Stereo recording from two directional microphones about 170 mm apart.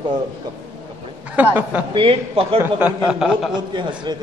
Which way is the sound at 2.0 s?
35° right (ahead or behind).